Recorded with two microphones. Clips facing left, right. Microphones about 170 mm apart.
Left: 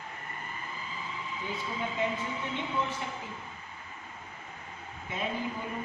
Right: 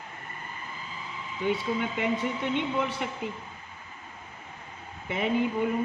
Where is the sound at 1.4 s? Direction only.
75° right (ahead or behind).